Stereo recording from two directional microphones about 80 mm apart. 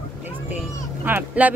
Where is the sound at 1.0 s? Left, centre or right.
Right.